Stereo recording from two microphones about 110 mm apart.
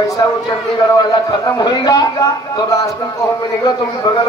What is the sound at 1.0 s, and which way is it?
A man's voice, 35° left (ahead or behind).